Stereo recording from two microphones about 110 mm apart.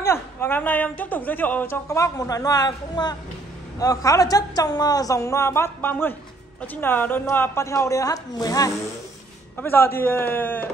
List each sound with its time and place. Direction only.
0.0 s a man's voice: 20° left (ahead or behind)
1.9 s a woman's voice: 30° left (ahead or behind)
9.6 s speech: 20° left (ahead or behind)